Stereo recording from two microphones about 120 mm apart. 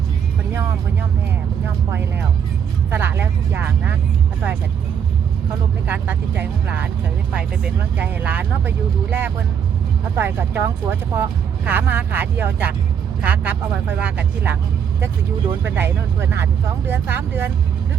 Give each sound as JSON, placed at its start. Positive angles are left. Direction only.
{"t": 2.9, "sound": "speech", "side_deg": -20}
{"t": 5.9, "sound": "speech", "side_deg": -15}
{"t": 15.6, "sound": "speech", "side_deg": -20}